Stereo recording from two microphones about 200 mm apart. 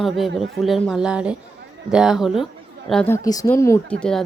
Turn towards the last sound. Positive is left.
turn(degrees=5)  # may be behind; listen again after turning